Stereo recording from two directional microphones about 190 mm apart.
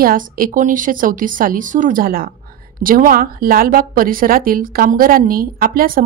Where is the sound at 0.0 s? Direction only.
50° right (ahead or behind).